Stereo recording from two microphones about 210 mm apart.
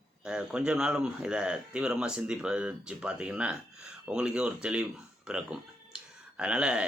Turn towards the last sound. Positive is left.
turn(degrees=-5)  # may be behind; listen again after turning